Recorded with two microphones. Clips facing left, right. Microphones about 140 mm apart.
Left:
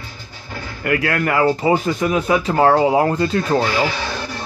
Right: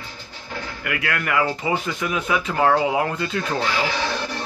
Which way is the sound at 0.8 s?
40° left (ahead or behind).